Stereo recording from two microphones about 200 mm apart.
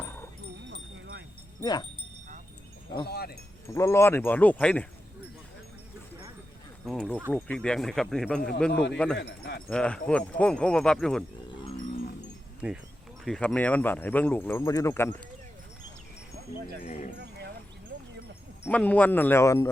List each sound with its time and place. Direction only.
0.0 s dog: 10° left (ahead or behind)
0.7 s wind chime: 65° right (ahead or behind)
1.6 s speech: 20° left (ahead or behind)
3.1 s speech: 50° left (ahead or behind)
3.8 s speech: 15° left (ahead or behind)
6.8 s speech: 5° left (ahead or behind)
9.1 s wind chime: 55° left (ahead or behind)
9.6 s speech: 5° left (ahead or behind)
12.6 s speech: 5° right (ahead or behind); by 15.1 s 15° left (ahead or behind)
16.8 s speech: 35° left (ahead or behind)
18.6 s speech: 5° left (ahead or behind)